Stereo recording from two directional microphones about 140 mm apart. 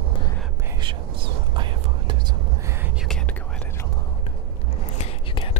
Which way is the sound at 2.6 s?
15° right (ahead or behind).